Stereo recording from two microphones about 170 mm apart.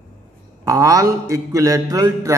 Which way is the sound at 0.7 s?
20° right (ahead or behind).